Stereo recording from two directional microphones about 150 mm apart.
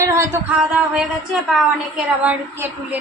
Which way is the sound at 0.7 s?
5° right (ahead or behind).